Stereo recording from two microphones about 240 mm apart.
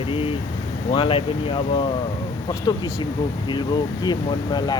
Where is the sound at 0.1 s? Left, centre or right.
Left.